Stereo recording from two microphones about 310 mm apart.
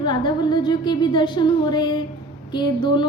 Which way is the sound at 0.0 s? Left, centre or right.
Centre.